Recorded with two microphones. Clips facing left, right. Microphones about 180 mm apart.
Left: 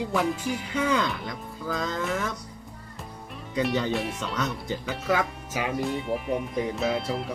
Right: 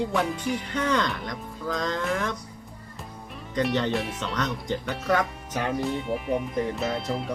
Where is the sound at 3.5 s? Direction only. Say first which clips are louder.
Right 1 dB; 5° left (ahead or behind).